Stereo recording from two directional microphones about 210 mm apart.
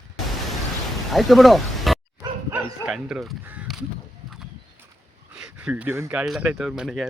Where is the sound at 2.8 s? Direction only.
5° right (ahead or behind).